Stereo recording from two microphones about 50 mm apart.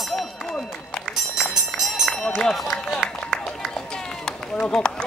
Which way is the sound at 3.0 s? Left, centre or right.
Centre.